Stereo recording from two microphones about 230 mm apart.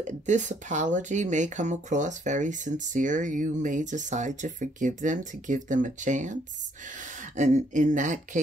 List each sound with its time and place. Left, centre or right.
0.0 s speech: right